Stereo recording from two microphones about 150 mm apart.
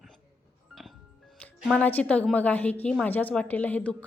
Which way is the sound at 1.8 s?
10° left (ahead or behind).